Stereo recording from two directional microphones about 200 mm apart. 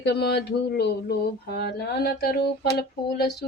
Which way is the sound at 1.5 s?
55° left (ahead or behind).